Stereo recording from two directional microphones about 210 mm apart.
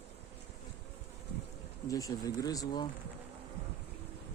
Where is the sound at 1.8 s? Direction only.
15° left (ahead or behind).